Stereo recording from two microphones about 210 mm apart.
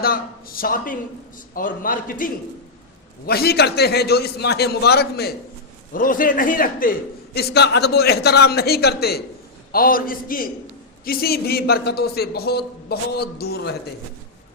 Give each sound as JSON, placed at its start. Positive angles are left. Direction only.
{"t": 0.0, "sound": "a man's voice", "side_deg": 45}
{"t": 7.3, "sound": "a man's voice", "side_deg": 50}